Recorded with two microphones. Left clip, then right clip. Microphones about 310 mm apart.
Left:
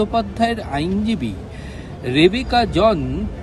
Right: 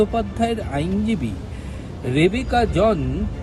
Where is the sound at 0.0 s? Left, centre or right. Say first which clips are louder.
Left 2 dB; centre.